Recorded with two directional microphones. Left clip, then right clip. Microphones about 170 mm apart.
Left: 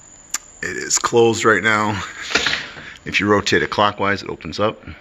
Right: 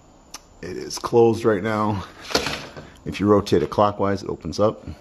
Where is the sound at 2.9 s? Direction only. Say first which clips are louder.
Left 10 dB; 20° right (ahead or behind).